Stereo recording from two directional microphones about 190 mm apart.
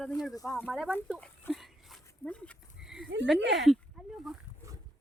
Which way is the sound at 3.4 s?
70° right (ahead or behind).